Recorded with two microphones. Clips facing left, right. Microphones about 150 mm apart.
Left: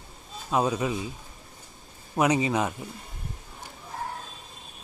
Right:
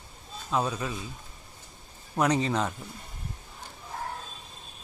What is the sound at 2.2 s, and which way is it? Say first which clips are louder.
Speech: left 2 dB; 10° left (ahead or behind).